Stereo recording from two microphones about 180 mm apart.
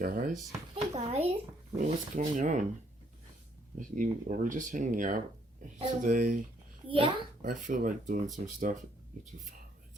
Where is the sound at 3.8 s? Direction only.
45° right (ahead or behind).